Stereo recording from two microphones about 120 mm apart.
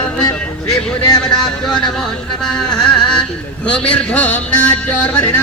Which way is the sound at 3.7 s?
10° left (ahead or behind).